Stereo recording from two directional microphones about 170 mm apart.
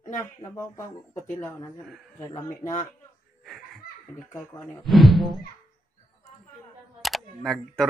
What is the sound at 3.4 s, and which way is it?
Laughter, centre (ahead or behind).